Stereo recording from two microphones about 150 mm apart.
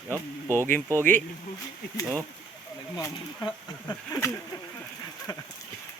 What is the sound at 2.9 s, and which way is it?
Speech, 25° left (ahead or behind).